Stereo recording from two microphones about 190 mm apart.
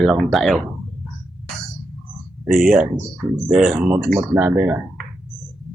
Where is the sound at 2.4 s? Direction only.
5° right (ahead or behind).